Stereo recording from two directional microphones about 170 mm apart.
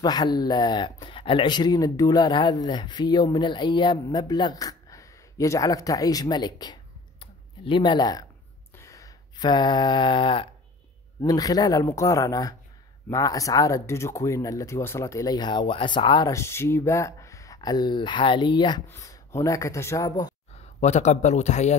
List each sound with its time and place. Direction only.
0.0 s speech: 25° left (ahead or behind)
8.7 s a sound: 20° left (ahead or behind)
11.2 s speech: 20° left (ahead or behind)
18.9 s speech: 15° left (ahead or behind)
20.8 s speech: 45° left (ahead or behind)